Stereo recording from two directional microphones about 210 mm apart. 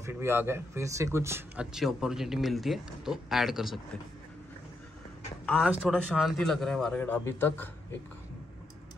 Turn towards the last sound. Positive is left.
turn(degrees=10)  # may be behind; listen again after turning